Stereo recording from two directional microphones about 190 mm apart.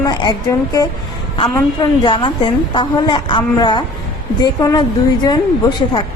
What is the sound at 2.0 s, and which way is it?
A woman's voice, 25° left (ahead or behind).